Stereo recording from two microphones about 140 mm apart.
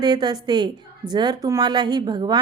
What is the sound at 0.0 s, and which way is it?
A woman's voice, 30° right (ahead or behind).